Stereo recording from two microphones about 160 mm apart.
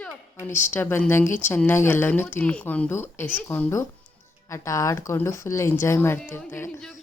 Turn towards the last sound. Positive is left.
turn(degrees=15)  # may be behind; listen again after turning